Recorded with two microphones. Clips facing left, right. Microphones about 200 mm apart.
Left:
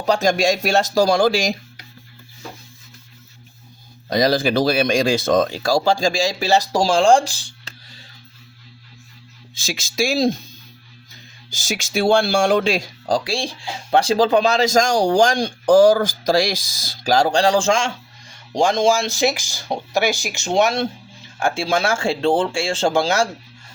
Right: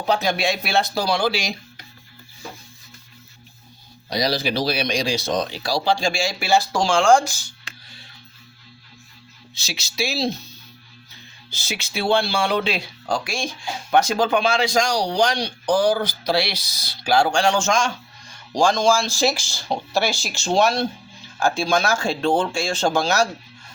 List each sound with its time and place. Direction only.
0.0 s speech: 45° left (ahead or behind)
4.1 s speech: 50° left (ahead or behind); by 7.7 s 30° left (ahead or behind)
9.6 s speech: 50° left (ahead or behind)
11.5 s speech: 45° left (ahead or behind); by 23.3 s 25° left (ahead or behind)